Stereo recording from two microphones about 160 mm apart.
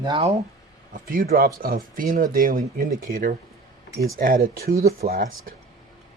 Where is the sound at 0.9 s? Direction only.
60° right (ahead or behind).